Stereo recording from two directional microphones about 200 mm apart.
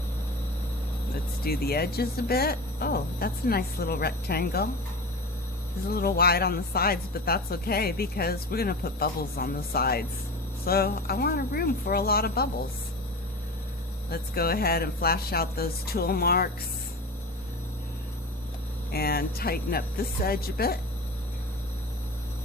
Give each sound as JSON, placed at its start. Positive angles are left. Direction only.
{"t": 1.5, "sound": "a woman's voice", "side_deg": 50}
{"t": 5.9, "sound": "a woman's voice", "side_deg": 50}
{"t": 14.1, "sound": "a woman's voice", "side_deg": 50}
{"t": 18.9, "sound": "a woman's voice", "side_deg": 50}